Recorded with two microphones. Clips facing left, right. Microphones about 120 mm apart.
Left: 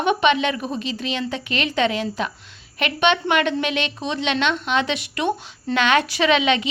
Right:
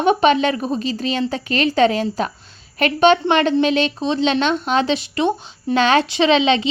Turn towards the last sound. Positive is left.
turn(degrees=-30)  # may be behind; listen again after turning